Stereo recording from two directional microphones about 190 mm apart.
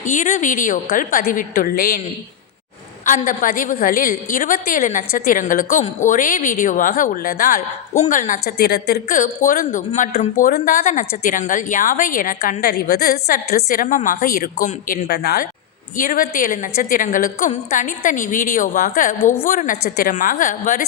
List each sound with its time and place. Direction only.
0.0 s a woman's voice: 45° left (ahead or behind)
3.1 s a woman's voice: 45° left (ahead or behind)